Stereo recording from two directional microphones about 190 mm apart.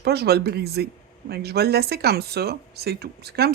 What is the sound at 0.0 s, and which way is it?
Speech, 55° right (ahead or behind).